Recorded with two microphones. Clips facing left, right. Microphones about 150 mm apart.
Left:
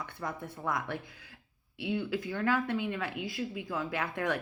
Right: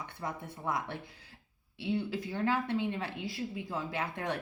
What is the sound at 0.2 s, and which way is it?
A woman's voice, 25° right (ahead or behind).